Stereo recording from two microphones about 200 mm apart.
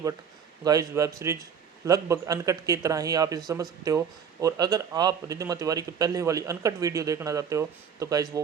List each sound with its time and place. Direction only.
0.6 s speech: 15° right (ahead or behind)